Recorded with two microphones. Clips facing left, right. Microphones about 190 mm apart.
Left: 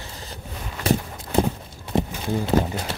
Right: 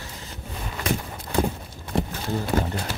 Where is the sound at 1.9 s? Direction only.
20° left (ahead or behind).